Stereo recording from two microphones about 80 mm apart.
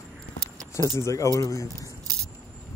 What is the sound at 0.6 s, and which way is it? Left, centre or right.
Keys jangling, right.